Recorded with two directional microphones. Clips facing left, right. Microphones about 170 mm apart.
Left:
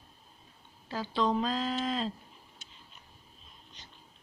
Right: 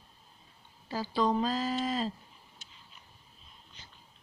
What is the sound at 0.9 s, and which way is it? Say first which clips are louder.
Speech: right 1 dB; 5° right (ahead or behind).